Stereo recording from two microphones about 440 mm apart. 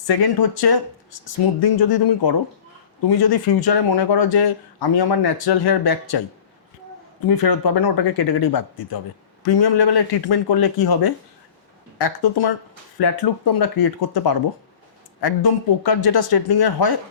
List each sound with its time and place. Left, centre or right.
0.1 s speech: left
7.3 s speech: left